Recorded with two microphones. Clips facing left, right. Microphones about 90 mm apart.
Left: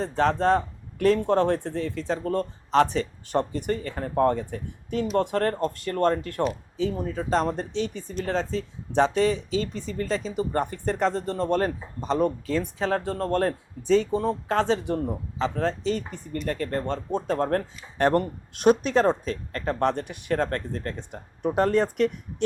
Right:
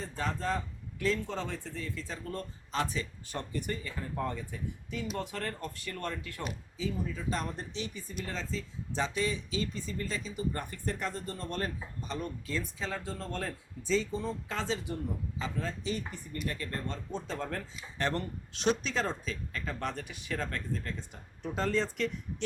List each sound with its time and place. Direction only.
0.0 s speech: 70° left (ahead or behind); by 7.3 s 55° left (ahead or behind)
7.3 s speech: 75° left (ahead or behind)
7.7 s speech: 65° left (ahead or behind)
15.5 s speech: 65° left (ahead or behind)
16.5 s speech: 45° left (ahead or behind)